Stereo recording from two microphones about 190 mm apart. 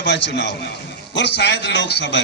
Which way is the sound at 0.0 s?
65° left (ahead or behind).